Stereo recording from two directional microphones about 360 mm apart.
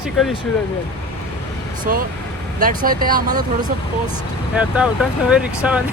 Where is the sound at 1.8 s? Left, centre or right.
Right.